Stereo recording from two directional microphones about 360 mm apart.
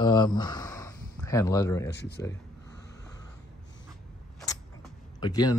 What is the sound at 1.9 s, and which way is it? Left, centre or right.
Speech, left.